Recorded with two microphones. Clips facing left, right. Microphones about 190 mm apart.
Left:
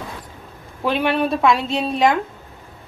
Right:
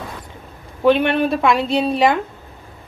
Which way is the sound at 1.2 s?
Centre (ahead or behind).